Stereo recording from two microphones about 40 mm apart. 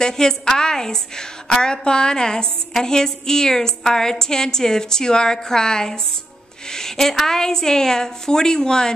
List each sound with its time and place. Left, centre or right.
0.0 s a woman's voice: centre